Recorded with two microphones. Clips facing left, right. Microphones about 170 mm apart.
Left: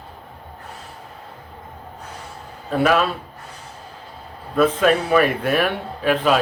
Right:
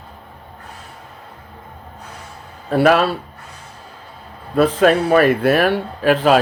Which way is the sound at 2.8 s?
40° right (ahead or behind).